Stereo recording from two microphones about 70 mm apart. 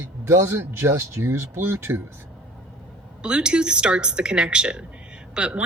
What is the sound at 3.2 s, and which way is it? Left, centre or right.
Speech, centre.